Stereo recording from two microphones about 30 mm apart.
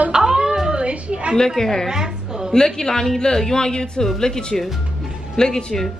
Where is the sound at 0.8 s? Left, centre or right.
Right.